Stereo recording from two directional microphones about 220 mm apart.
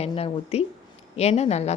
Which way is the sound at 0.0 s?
25° left (ahead or behind).